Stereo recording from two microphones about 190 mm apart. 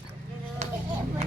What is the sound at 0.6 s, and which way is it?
Vehicle, 35° right (ahead or behind).